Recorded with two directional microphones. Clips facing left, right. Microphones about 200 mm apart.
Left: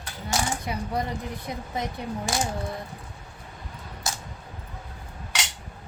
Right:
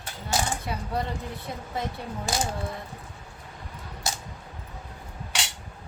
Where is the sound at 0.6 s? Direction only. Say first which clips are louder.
Left 1 dB; 15° left (ahead or behind).